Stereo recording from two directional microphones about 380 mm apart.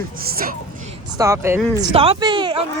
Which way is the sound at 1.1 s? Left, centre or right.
Centre.